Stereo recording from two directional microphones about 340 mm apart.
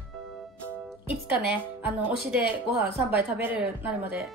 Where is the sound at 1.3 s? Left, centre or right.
Centre.